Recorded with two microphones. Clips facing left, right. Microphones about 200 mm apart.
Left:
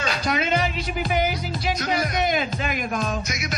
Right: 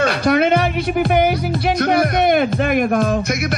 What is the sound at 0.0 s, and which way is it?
Speech, 60° right (ahead or behind).